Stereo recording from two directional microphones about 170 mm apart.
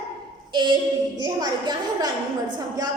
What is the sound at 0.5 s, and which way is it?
A woman's voice, 25° right (ahead or behind).